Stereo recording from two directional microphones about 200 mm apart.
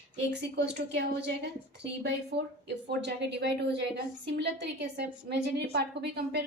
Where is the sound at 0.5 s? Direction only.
60° right (ahead or behind).